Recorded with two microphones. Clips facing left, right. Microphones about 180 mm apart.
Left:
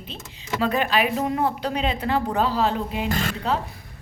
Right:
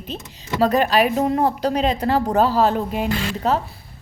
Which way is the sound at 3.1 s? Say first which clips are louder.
Right 2 dB; 50° left (ahead or behind).